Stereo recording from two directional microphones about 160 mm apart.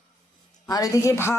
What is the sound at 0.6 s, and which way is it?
Speech, 20° left (ahead or behind).